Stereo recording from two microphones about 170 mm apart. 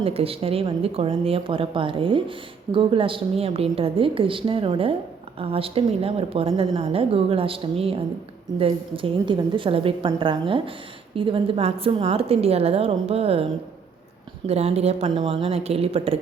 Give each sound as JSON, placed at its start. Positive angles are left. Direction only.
{"t": 0.0, "sound": "a woman's voice", "side_deg": -35}